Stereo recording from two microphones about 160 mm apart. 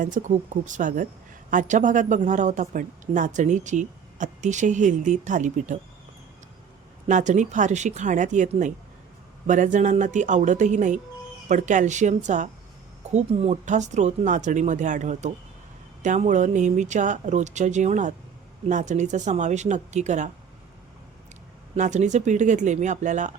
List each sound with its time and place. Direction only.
0.0 s speech: 50° right (ahead or behind)
7.1 s speech: 50° right (ahead or behind)
21.8 s speech: 45° right (ahead or behind)